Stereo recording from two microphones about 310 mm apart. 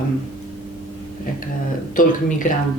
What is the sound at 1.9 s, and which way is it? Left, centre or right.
Speech, left.